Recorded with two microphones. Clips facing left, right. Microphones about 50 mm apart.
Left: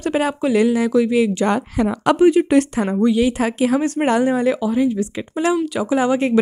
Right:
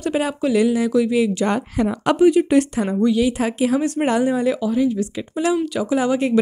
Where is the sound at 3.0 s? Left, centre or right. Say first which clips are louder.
Left 1 dB; left.